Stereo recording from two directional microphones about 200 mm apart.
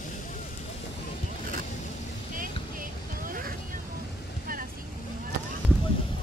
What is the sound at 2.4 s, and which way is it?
Vehicle, 45° right (ahead or behind).